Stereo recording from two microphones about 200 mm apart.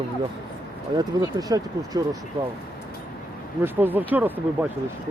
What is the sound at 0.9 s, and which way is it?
Speech, 20° right (ahead or behind).